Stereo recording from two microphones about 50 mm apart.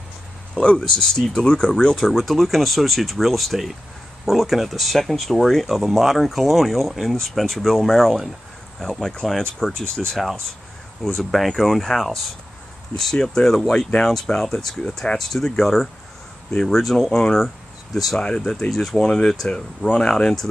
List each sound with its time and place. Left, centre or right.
0.6 s speech: centre
2.0 s speech: centre
15.1 s speech: centre
18.2 s speech: centre
18.9 s speech: centre